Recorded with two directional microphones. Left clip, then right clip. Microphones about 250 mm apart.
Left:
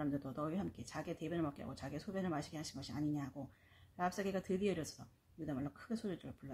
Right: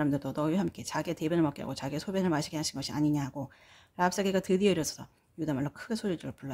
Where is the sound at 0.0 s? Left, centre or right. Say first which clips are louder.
Right 11 dB; right.